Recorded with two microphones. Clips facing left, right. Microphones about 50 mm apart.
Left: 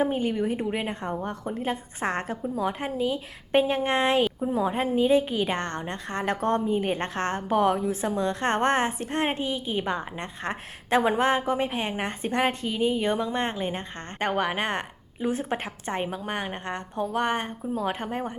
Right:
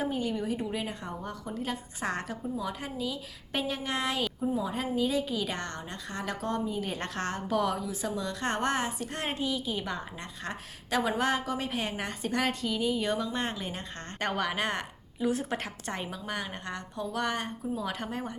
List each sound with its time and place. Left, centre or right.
0.0 s a woman's voice: left